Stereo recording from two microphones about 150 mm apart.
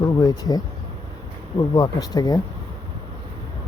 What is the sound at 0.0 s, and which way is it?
Speech, 25° left (ahead or behind).